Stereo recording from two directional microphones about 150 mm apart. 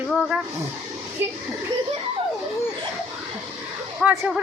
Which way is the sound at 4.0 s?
10° right (ahead or behind).